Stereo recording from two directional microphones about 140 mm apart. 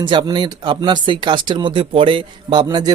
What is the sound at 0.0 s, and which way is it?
Speech, 35° right (ahead or behind).